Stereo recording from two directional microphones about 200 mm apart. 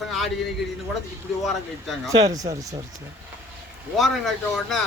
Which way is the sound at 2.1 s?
20° right (ahead or behind).